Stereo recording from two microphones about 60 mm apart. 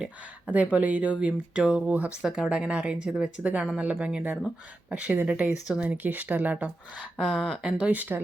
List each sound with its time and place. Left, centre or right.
0.0 s speech: right
2.2 s speech: centre
5.8 s speech: right
7.2 s speech: centre
7.6 s speech: centre
7.9 s speech: right